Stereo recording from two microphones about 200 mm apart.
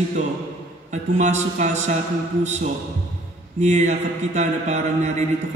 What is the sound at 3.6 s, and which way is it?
Mantra, 35° right (ahead or behind).